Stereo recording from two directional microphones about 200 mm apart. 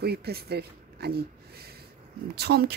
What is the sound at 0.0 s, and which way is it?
Speech, 55° right (ahead or behind).